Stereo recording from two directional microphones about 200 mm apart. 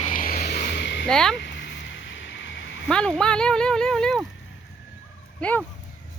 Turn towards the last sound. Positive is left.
turn(degrees=10)  # may be behind; listen again after turning